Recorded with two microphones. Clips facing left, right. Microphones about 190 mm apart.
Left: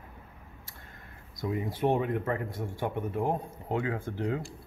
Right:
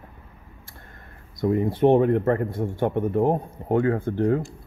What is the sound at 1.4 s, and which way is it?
Speech, 55° right (ahead or behind).